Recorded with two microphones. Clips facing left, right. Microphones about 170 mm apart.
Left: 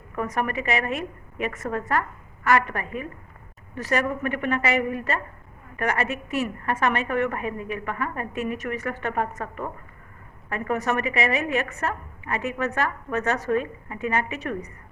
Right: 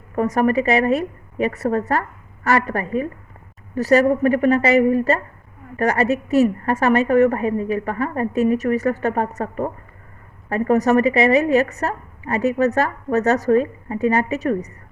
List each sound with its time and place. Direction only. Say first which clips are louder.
0.2 s a woman's voice: right 9 dB; 40° right (ahead or behind)